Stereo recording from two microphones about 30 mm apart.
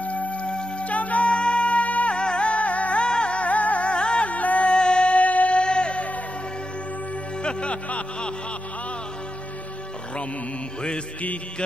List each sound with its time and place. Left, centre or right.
0.0 s music: left
0.5 s music: left
0.8 s music: left
1.3 s music: left
2.1 s music: left
3.1 s music: left
3.4 s music: left
3.9 s music: left
4.3 s music: left
4.7 s music: left
5.1 s a sound: left
5.6 s music: left
7.4 s music: left